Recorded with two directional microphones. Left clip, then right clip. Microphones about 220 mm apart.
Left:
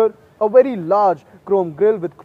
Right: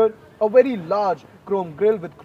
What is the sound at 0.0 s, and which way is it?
A man's voice, 50° left (ahead or behind).